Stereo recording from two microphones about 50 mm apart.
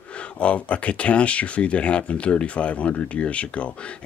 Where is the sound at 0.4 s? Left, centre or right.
Left.